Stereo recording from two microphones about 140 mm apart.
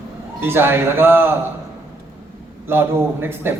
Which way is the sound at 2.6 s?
15° right (ahead or behind).